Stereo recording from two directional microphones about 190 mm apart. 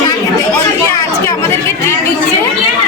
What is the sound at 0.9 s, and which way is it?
Speech, 15° left (ahead or behind).